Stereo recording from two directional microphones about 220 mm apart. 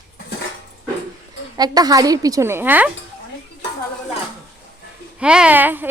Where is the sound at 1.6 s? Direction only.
15° right (ahead or behind).